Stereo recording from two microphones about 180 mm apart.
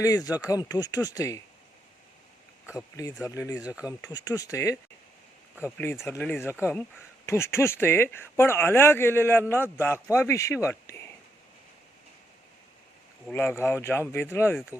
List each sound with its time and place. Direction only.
0.3 s speech: 20° left (ahead or behind)
2.7 s speech: 20° left (ahead or behind)
3.6 s speech: 5° right (ahead or behind)
3.8 s speech: 20° left (ahead or behind)
13.2 s speech: 10° left (ahead or behind)